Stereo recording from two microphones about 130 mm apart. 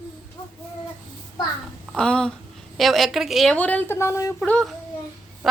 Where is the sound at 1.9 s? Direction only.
5° left (ahead or behind).